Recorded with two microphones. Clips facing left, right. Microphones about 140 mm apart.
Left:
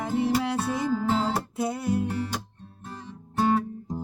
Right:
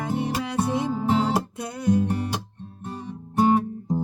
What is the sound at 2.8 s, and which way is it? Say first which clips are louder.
Music: right 6 dB; 20° right (ahead or behind).